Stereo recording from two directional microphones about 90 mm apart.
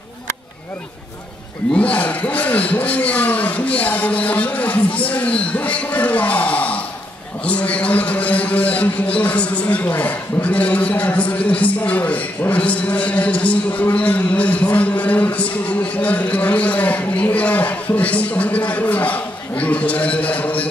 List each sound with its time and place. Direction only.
1.7 s a man's voice: 15° left (ahead or behind)